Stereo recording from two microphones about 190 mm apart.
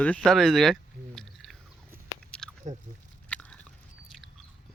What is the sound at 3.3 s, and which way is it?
Biting, 5° left (ahead or behind).